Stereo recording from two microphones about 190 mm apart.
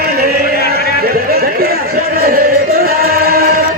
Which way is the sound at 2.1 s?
50° right (ahead or behind).